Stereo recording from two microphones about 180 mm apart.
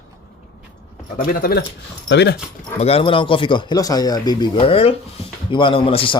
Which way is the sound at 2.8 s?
35° left (ahead or behind).